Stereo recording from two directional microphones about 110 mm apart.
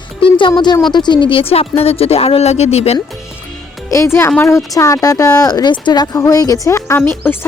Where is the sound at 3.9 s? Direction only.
25° left (ahead or behind).